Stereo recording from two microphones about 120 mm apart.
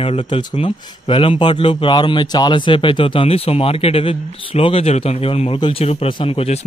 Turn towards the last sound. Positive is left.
turn(degrees=55)  # may be behind; listen again after turning